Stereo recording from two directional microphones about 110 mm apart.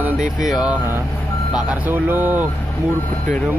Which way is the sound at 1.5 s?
15° right (ahead or behind).